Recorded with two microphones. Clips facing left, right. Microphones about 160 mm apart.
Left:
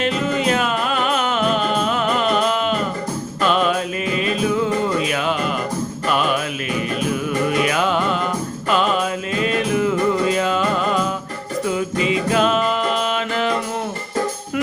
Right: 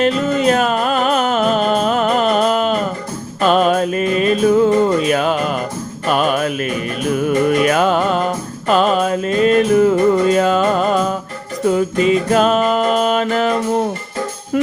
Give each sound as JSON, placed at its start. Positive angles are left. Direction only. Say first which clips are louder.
{"t": 0.0, "sound": "music", "louder": "right 5 dB", "side_deg": -40}